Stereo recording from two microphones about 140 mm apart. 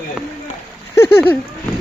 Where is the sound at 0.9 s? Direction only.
15° left (ahead or behind).